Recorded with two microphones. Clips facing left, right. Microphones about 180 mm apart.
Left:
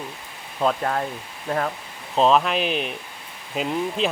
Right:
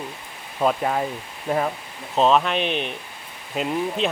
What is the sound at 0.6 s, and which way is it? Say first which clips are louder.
Speech: right 1 dB; 5° right (ahead or behind).